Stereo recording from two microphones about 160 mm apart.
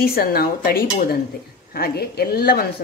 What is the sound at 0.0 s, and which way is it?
A woman's voice, 70° left (ahead or behind).